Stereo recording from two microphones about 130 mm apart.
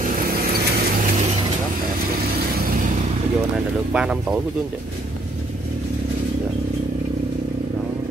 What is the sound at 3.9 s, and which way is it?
Speech, 5° right (ahead or behind).